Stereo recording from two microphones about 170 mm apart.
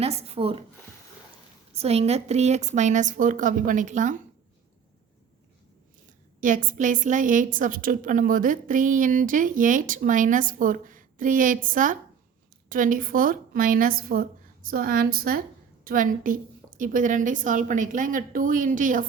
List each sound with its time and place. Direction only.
0.0 s speech: 35° right (ahead or behind)
1.7 s a woman's voice: 35° right (ahead or behind)
6.4 s a woman's voice: 50° right (ahead or behind)